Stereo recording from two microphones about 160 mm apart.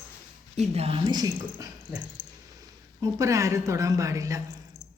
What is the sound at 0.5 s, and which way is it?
Speech, 40° right (ahead or behind).